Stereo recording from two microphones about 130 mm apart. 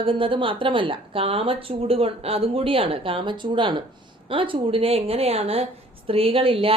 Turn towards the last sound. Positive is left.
turn(degrees=-45)  # may be behind; listen again after turning